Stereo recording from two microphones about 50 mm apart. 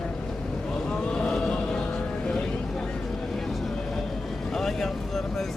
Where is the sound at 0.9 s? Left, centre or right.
Centre.